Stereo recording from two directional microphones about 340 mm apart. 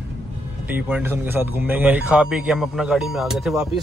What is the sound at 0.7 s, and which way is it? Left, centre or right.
Speech, centre.